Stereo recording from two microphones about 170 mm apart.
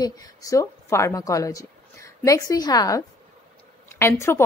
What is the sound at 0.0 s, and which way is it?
A woman's voice, 20° left (ahead or behind).